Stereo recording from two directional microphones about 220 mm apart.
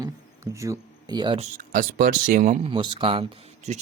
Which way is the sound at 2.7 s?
25° right (ahead or behind).